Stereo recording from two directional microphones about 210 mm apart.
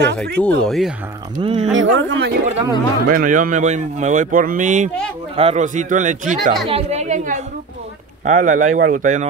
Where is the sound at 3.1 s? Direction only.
40° right (ahead or behind).